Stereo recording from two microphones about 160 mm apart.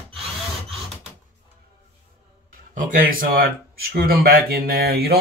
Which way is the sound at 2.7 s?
55° right (ahead or behind).